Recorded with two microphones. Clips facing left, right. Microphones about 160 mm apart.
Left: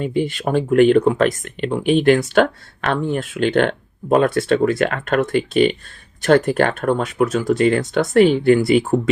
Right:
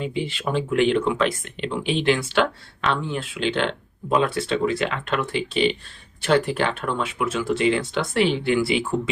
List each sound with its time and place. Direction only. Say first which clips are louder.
0.0 s speech: left 6 dB; 50° left (ahead or behind)